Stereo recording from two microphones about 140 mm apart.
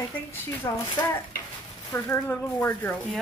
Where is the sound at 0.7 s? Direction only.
30° left (ahead or behind).